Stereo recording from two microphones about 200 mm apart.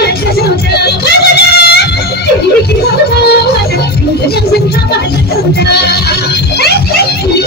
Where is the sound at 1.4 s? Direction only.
55° left (ahead or behind).